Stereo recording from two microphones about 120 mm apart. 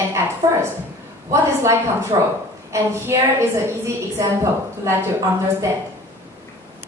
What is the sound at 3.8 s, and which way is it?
A woman's voice, 25° right (ahead or behind).